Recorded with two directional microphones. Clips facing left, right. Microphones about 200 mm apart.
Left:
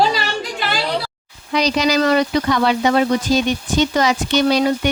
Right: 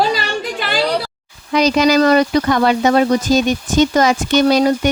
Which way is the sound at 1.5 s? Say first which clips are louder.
Right 4 dB; 50° right (ahead or behind).